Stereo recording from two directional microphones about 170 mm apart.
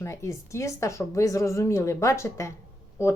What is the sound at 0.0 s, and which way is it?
Speech, 15° left (ahead or behind).